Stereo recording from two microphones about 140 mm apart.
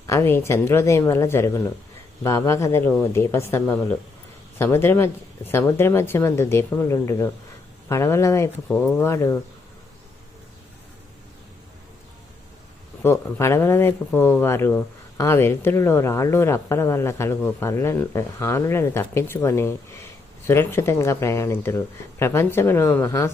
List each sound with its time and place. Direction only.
0.1 s a woman's voice: 15° left (ahead or behind)
13.0 s a woman's voice: 15° left (ahead or behind)